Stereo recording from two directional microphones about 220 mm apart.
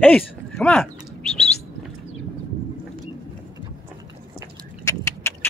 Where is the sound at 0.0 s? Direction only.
5° left (ahead or behind).